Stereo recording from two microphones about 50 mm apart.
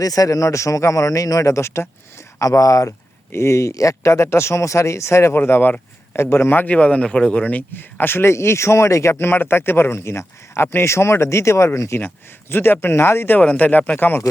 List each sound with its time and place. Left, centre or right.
0.3 s a man's voice: left
2.5 s a man's voice: left
3.3 s speech: left
5.4 s speech: left
6.7 s speech: left
7.8 s speech: left
9.2 s speech: left
11.9 s speech: left
13.4 s speech: left